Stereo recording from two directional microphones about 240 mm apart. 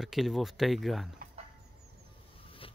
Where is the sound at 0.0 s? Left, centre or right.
Centre.